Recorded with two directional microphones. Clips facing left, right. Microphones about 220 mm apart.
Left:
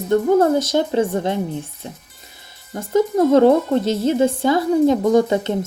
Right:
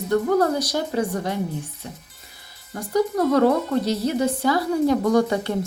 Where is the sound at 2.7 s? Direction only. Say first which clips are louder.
Left 4 dB; 25° left (ahead or behind).